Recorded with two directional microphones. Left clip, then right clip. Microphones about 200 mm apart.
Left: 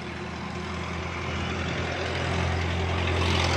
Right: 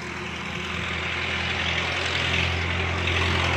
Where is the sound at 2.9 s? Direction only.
15° right (ahead or behind).